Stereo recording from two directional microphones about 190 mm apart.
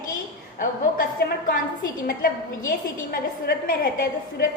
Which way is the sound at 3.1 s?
55° left (ahead or behind).